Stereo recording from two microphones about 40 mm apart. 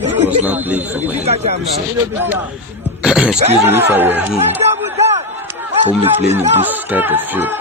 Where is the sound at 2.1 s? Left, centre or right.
Right.